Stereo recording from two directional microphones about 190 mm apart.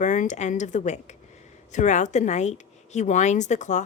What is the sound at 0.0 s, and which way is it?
A woman's voice, 40° left (ahead or behind).